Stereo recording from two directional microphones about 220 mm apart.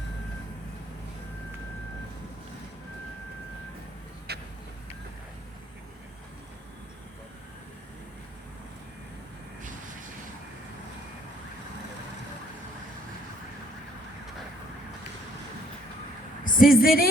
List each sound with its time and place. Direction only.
4.3 s vehicle: 45° right (ahead or behind)
16.4 s a woman's voice: 40° left (ahead or behind)